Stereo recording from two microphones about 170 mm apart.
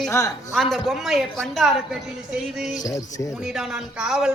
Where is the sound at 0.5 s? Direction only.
Centre (ahead or behind).